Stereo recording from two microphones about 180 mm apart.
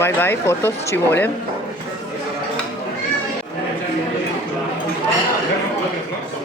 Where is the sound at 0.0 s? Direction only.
15° left (ahead or behind).